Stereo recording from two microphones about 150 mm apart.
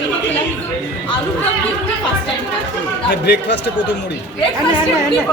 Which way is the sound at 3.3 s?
90° left.